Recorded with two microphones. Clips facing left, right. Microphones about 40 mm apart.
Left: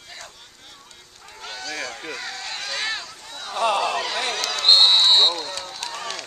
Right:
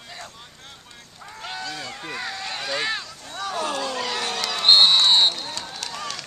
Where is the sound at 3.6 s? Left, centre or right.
Left.